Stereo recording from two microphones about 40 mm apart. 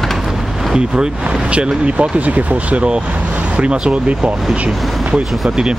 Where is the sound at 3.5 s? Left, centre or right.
Right.